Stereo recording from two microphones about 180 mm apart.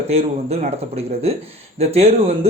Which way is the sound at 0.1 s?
35° right (ahead or behind).